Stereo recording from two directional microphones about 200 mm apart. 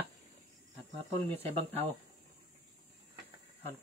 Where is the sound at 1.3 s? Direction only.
10° left (ahead or behind).